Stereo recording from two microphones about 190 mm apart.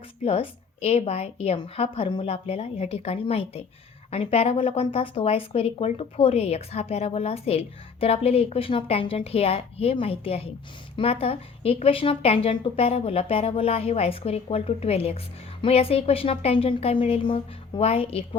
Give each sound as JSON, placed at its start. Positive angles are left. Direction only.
{"t": 0.3, "sound": "speech", "side_deg": 30}